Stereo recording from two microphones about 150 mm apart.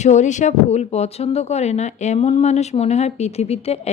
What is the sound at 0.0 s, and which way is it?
A woman's voice, 50° left (ahead or behind).